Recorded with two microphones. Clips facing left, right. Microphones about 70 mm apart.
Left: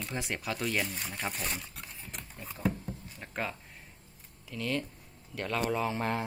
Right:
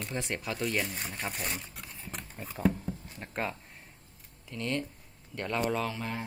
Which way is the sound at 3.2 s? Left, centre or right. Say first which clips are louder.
Right 2 dB; centre.